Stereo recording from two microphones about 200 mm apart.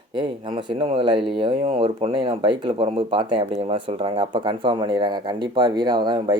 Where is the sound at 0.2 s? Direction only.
25° right (ahead or behind).